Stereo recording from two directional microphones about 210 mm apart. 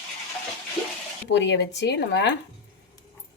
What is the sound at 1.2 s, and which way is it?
Speech, 55° left (ahead or behind).